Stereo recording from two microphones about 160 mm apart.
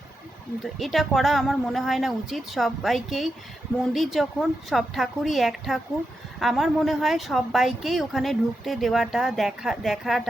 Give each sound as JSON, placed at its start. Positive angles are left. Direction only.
{"t": 0.6, "sound": "speech", "side_deg": 0}